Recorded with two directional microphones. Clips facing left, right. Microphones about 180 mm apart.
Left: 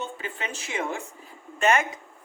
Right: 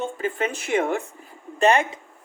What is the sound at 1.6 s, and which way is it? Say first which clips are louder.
Speech: right 4 dB; 35° right (ahead or behind).